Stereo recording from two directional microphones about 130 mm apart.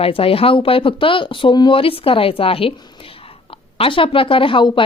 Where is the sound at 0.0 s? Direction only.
45° left (ahead or behind).